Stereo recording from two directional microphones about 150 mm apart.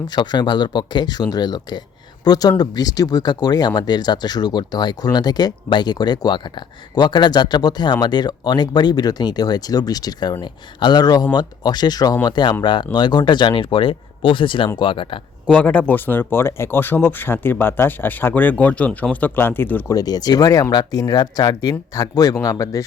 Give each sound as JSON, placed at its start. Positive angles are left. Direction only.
{"t": 0.1, "sound": "speech", "side_deg": 30}
{"t": 15.4, "sound": "speech", "side_deg": 10}
{"t": 20.0, "sound": "speech", "side_deg": 25}